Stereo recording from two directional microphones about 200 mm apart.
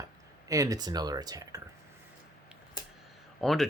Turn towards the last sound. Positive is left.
turn(degrees=0)  # may be behind; listen again after turning